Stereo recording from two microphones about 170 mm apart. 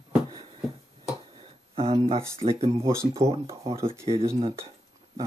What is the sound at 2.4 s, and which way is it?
Speech, 35° right (ahead or behind).